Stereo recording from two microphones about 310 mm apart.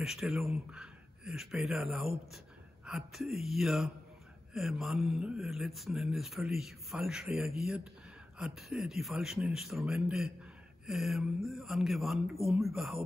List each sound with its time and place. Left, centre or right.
0.0 s speech: centre